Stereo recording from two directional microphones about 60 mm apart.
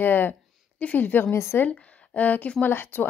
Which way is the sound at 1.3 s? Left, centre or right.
Left.